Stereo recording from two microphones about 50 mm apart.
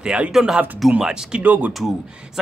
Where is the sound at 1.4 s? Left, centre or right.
Right.